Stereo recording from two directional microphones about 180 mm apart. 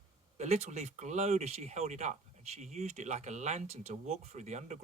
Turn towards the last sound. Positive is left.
turn(degrees=-40)  # may be behind; listen again after turning